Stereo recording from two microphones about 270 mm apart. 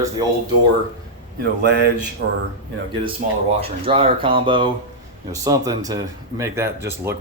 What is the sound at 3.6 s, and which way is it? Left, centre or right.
Speech, centre.